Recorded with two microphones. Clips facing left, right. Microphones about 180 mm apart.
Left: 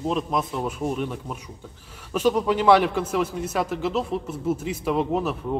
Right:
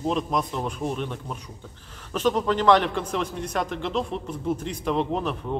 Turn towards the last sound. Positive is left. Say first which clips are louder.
# left 2 dB
turn(degrees=5)  # may be behind; listen again after turning